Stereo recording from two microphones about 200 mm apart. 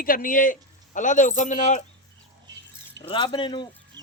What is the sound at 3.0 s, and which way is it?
Speech, 25° left (ahead or behind).